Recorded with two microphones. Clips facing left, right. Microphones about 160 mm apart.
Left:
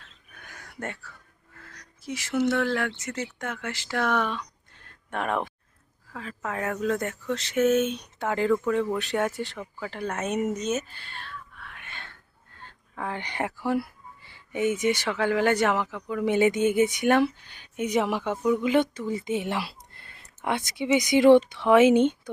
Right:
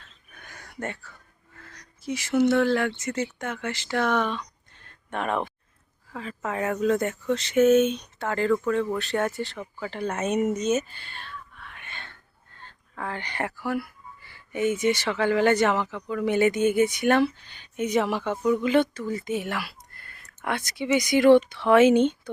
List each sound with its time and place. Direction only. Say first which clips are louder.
0.3 s a sound: right 2 dB; 5° left (ahead or behind)
2.0 s speech: right 4 dB; centre (ahead or behind)
8.2 s speech: even; 15° left (ahead or behind)
9.6 s speech: right 2 dB; centre (ahead or behind)
10.4 s whispering: right 3 dB; centre (ahead or behind)
12.5 s a sound: left 1 dB; 10° left (ahead or behind); by 14.3 s 25° left (ahead or behind)
14.5 s speech: right 1 dB; 15° left (ahead or behind)